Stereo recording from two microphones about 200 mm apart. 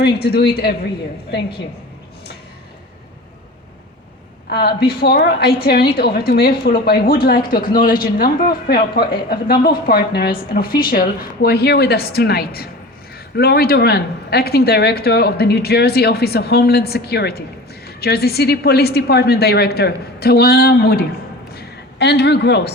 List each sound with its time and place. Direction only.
0.0 s speech: 50° left (ahead or behind)
4.4 s speech: 50° left (ahead or behind)
21.5 s a sound: 55° left (ahead or behind)